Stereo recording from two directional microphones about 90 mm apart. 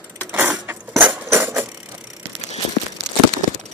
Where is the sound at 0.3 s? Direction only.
20° right (ahead or behind).